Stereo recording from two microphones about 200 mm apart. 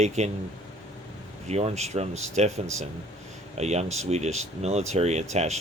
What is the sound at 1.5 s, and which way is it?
Speech, 35° right (ahead or behind).